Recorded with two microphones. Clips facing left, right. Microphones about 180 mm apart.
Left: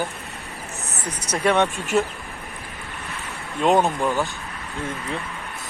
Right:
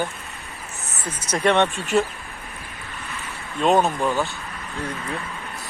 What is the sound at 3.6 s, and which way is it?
Speech, 15° left (ahead or behind).